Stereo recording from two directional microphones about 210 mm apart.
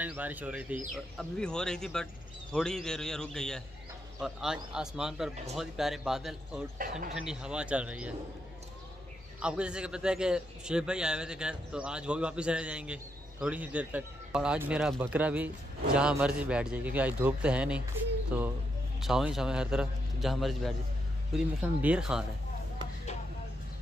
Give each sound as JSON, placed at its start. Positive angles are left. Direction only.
{"t": 0.0, "sound": "a man's voice", "side_deg": -5}
{"t": 6.8, "sound": "speech", "side_deg": -40}
{"t": 7.2, "sound": "a man's voice", "side_deg": -5}
{"t": 9.4, "sound": "a man's voice", "side_deg": -5}